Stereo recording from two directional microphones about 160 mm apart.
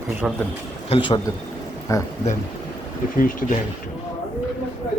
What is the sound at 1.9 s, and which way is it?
Speech, 20° left (ahead or behind).